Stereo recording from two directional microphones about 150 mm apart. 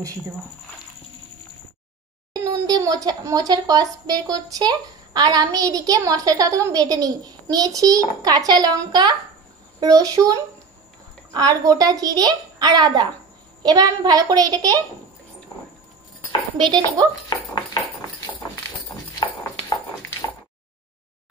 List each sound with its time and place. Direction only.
2.3 s speech: 25° right (ahead or behind)
16.5 s a child's voice: 30° right (ahead or behind)
17.3 s dog: 25° left (ahead or behind)